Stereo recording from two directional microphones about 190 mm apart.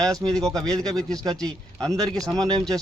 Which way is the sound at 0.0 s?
20° right (ahead or behind).